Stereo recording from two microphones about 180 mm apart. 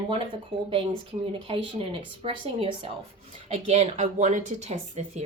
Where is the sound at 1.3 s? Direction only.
30° right (ahead or behind).